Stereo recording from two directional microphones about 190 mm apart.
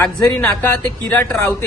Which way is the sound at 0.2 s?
10° left (ahead or behind).